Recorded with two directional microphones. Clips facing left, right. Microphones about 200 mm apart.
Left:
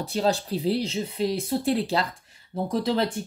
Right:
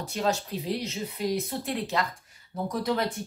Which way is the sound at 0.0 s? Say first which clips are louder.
Left 4 dB; 30° left (ahead or behind).